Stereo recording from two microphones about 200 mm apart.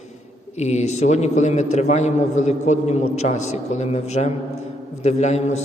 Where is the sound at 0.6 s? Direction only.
35° left (ahead or behind).